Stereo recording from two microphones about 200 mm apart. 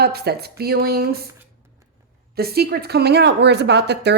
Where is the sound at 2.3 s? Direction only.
50° right (ahead or behind).